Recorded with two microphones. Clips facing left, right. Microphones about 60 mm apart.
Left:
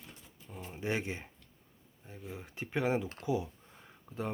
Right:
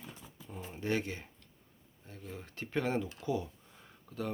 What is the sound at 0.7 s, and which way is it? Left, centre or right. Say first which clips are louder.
Speech: right 1 dB; centre.